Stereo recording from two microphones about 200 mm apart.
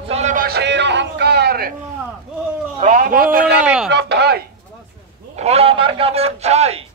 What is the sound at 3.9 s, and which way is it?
Speech, 55° right (ahead or behind).